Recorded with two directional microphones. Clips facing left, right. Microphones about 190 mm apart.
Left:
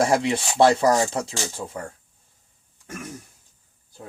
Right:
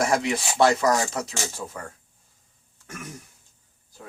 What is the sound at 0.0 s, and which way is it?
Speech, 30° left (ahead or behind).